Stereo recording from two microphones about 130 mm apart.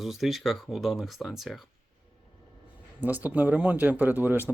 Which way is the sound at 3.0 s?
15° right (ahead or behind).